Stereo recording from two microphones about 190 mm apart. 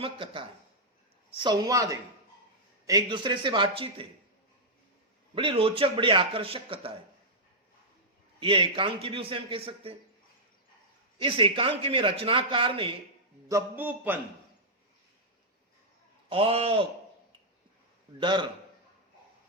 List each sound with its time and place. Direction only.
0.0 s a man's voice: 25° right (ahead or behind)
5.3 s a man's voice: 30° right (ahead or behind)
8.4 s a man's voice: 25° right (ahead or behind)
11.2 s a man's voice: 25° right (ahead or behind)
13.5 s a man's voice: 10° right (ahead or behind)
16.3 s a man's voice: 30° right (ahead or behind)
18.2 s a man's voice: 25° right (ahead or behind)